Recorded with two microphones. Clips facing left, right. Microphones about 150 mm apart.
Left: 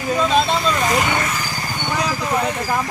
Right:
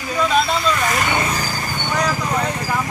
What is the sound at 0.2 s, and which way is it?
Vehicle, 25° left (ahead or behind).